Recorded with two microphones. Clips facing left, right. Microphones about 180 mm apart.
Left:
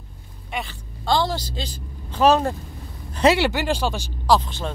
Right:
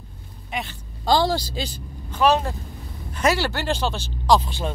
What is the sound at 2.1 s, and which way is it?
Speech, 40° left (ahead or behind).